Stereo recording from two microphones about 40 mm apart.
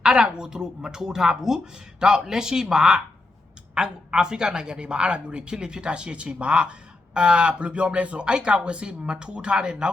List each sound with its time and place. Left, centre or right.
0.0 s speech: centre